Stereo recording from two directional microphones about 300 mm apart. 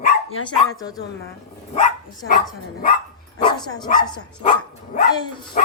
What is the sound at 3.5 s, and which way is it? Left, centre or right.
Dog, centre.